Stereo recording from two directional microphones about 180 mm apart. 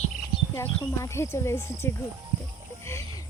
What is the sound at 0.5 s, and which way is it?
Speech, 15° left (ahead or behind).